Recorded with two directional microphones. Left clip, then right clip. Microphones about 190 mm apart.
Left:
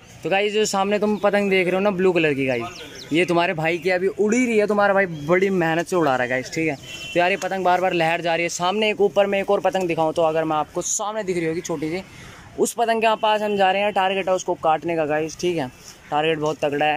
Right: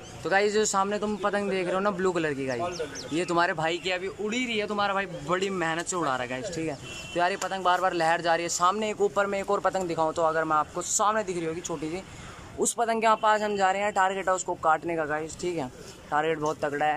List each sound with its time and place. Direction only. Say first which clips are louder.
0.2 s speech: left 4 dB; 15° left (ahead or behind)